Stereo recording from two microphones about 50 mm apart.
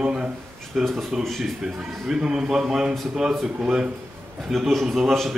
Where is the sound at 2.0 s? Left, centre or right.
Centre.